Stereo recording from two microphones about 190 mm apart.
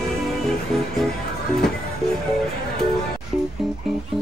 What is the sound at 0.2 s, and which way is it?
Music, centre (ahead or behind).